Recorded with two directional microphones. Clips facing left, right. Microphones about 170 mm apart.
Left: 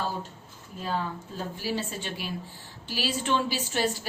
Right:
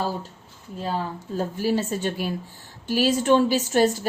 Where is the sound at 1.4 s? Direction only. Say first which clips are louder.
Right 8 dB; 45° right (ahead or behind).